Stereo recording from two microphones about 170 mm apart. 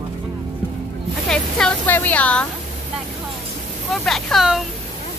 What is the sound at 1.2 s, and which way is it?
Speech, 5° left (ahead or behind).